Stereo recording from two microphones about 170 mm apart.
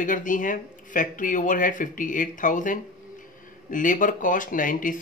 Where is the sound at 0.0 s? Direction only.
50° left (ahead or behind).